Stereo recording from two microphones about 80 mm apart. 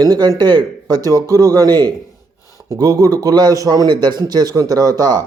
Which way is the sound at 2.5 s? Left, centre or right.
Right.